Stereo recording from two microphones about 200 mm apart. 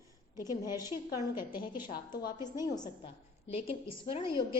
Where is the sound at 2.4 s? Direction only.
20° left (ahead or behind).